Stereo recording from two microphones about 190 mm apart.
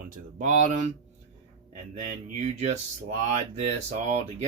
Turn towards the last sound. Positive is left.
turn(degrees=-35)  # may be behind; listen again after turning